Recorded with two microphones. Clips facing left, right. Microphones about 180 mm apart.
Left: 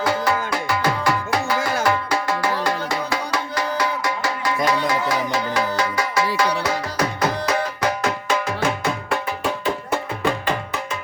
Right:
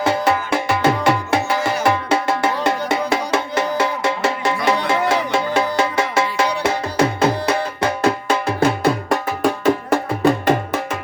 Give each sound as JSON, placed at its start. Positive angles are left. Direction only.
{"t": 0.0, "sound": "music", "side_deg": -25}